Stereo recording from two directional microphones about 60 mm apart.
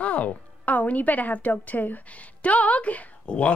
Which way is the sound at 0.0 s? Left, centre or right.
Left.